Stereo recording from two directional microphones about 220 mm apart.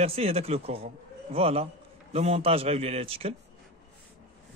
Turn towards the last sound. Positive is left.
turn(degrees=-25)  # may be behind; listen again after turning